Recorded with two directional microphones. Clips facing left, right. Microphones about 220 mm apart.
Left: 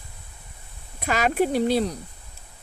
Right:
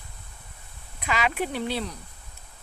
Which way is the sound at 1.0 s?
45° left (ahead or behind).